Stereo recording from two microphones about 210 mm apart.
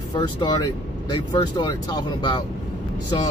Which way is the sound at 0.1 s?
20° left (ahead or behind).